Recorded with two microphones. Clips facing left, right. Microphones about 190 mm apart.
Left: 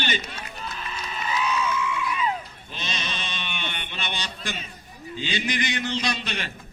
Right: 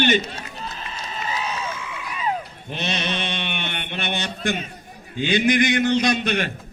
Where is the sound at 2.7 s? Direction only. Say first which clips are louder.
Right 8 dB; 60° right (ahead or behind).